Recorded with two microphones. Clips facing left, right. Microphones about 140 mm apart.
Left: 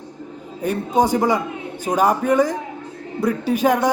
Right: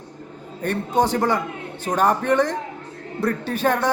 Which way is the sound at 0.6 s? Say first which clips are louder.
Left 2 dB; 10° left (ahead or behind).